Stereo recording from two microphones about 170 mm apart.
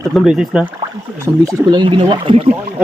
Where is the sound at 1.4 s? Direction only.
20° right (ahead or behind).